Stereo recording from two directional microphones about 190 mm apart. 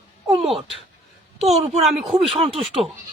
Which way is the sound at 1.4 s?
35° right (ahead or behind).